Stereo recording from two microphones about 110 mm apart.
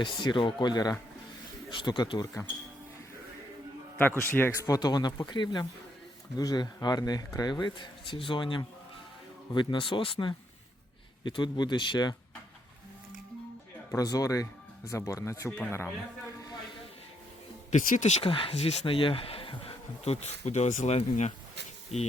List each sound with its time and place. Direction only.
0.2 s speech: 45° left (ahead or behind)
3.9 s a man's voice: 20° left (ahead or behind)
4.6 s speech: 35° left (ahead or behind)
13.9 s a man's voice: 30° left (ahead or behind)
17.7 s speech: 90° left
18.3 s speech: 55° left (ahead or behind)
18.9 s speech: 55° left (ahead or behind); by 21.3 s 85° left